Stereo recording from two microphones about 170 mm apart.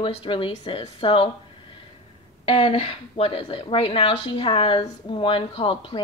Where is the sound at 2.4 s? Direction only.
30° left (ahead or behind).